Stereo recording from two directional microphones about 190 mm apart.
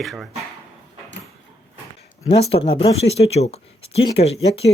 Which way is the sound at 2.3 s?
30° left (ahead or behind).